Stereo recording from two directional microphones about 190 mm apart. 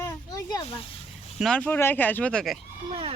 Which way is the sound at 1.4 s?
5° left (ahead or behind).